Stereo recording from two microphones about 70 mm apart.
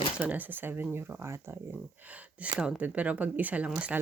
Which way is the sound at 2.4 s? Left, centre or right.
Centre.